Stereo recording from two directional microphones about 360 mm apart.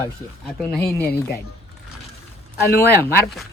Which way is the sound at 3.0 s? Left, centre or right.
Centre.